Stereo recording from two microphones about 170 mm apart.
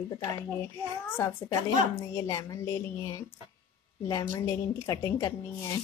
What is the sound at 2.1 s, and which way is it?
A woman's voice, 20° left (ahead or behind).